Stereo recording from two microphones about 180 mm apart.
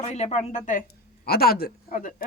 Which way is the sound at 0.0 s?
40° left (ahead or behind).